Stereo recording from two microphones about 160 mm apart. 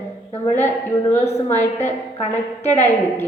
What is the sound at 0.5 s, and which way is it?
Speech, 10° left (ahead or behind).